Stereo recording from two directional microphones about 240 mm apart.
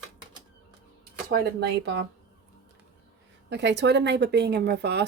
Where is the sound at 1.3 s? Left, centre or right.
Right.